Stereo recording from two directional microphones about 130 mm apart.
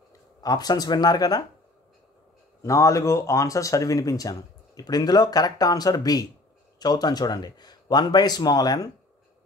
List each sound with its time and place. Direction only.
0.4 s speech: 30° left (ahead or behind)
2.6 s speech: 25° left (ahead or behind)